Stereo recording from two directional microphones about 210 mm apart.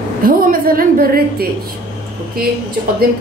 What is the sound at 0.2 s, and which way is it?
A woman's voice, 40° right (ahead or behind).